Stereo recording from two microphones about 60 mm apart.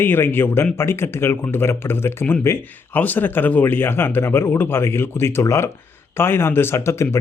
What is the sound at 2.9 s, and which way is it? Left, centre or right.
Speech, left.